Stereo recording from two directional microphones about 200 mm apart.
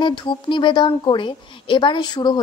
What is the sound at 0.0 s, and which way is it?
A woman's voice, 25° left (ahead or behind).